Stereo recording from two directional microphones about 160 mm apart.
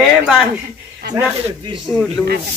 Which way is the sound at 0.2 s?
Centre (ahead or behind).